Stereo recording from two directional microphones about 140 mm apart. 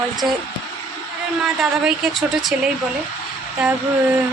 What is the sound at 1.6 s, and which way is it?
Speech, centre (ahead or behind).